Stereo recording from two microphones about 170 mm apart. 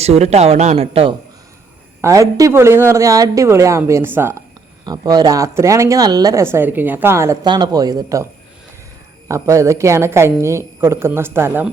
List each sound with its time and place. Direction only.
0.0 s speech: 40° right (ahead or behind)
2.0 s a man's voice: 20° right (ahead or behind)
9.3 s a man's voice: 15° right (ahead or behind)